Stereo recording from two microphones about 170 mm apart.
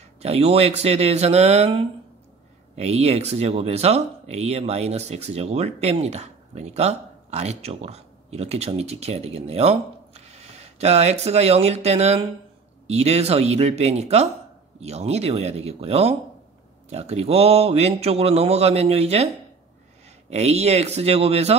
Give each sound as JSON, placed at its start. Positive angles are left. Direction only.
{"t": 0.2, "sound": "speech", "side_deg": -35}
{"t": 20.2, "sound": "speech", "side_deg": -40}